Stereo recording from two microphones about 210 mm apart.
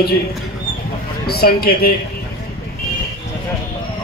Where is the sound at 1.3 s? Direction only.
50° left (ahead or behind).